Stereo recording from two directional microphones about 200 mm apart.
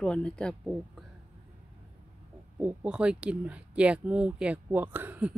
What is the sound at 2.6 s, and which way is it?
Speech, 5° right (ahead or behind).